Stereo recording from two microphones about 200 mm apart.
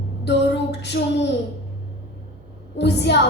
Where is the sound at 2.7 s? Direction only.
60° left (ahead or behind).